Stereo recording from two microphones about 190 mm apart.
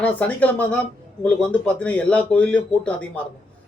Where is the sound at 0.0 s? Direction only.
5° left (ahead or behind).